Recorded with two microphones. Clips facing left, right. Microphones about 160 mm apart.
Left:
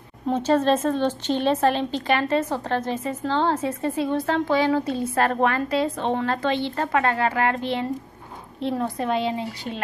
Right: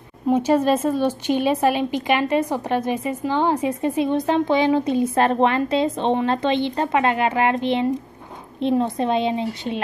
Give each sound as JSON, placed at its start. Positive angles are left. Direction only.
{"t": 0.3, "sound": "a woman's voice", "side_deg": -10}